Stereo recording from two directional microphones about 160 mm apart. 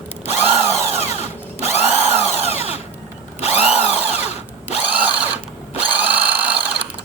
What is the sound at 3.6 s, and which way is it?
Drill, 10° right (ahead or behind).